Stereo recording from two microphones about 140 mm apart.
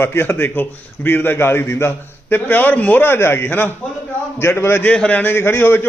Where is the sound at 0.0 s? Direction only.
15° left (ahead or behind).